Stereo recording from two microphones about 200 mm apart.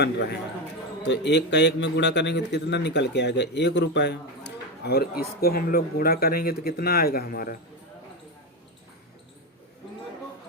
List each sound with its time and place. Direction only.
0.0 s speech: 55° left (ahead or behind)